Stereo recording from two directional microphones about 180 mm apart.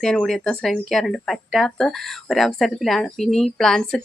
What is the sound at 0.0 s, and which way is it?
Speech, 5° left (ahead or behind).